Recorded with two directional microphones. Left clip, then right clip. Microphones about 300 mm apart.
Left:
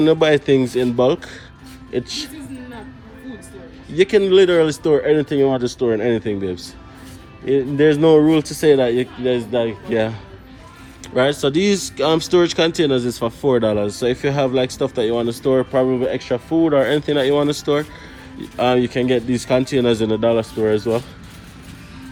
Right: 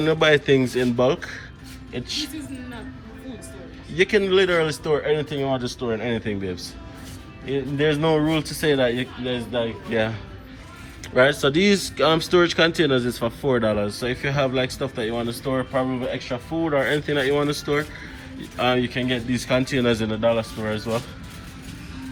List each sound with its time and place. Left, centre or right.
0.0 s speech: centre
3.9 s speech: centre